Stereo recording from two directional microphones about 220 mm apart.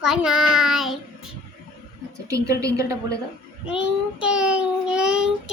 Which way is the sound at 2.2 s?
15° right (ahead or behind).